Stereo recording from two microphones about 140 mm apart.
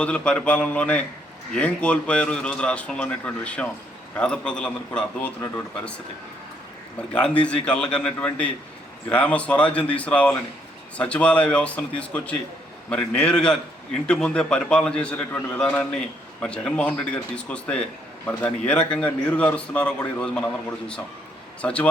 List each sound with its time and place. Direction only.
0.0 s a man's voice: 10° left (ahead or behind)
7.1 s a man's voice: 10° left (ahead or behind)